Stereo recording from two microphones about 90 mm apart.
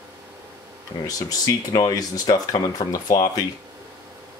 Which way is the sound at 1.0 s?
45° left (ahead or behind).